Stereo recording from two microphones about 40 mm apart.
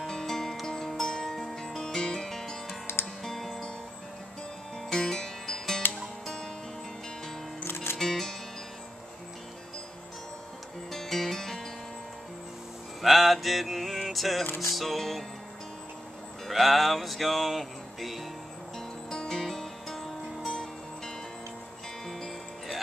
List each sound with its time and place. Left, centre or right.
0.0 s music: centre
4.8 s music: centre
7.6 s music: left
8.0 s music: centre
10.9 s music: centre
13.0 s mantra: centre
14.6 s music: centre
16.4 s music: centre
19.0 s music: centre
22.0 s music: centre